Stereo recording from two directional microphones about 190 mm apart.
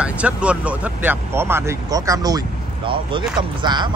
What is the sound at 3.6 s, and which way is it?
Speech, 25° right (ahead or behind).